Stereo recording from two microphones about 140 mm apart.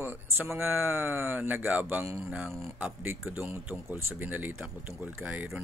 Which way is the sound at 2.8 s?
15° right (ahead or behind).